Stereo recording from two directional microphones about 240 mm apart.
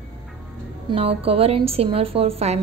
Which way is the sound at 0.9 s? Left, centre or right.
Right.